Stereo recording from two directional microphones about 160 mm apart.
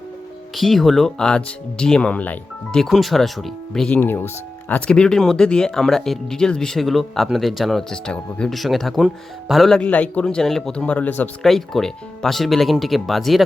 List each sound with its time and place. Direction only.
0.5 s speech: centre (ahead or behind)